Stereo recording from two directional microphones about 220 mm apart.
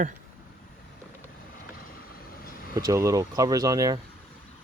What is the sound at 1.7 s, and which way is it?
Vehicle, 40° left (ahead or behind).